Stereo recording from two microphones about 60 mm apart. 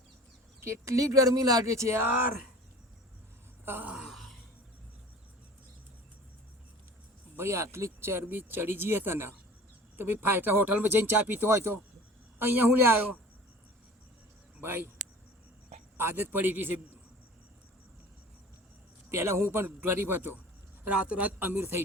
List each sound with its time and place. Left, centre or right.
0.6 s speech: right
3.7 s speech: right
3.9 s gasp: centre
7.3 s speech: right
14.6 s speech: right
16.0 s speech: right
19.1 s a man's voice: right
19.5 s speech: right
20.8 s a man's voice: right